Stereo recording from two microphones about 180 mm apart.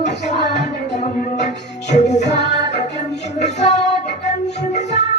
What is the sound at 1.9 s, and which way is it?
Music, 40° left (ahead or behind).